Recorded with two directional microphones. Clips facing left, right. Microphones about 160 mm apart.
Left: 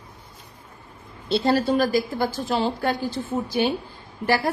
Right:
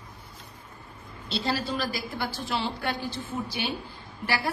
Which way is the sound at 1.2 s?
50° left (ahead or behind).